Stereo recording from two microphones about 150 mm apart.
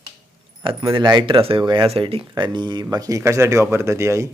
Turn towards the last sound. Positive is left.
turn(degrees=-20)  # may be behind; listen again after turning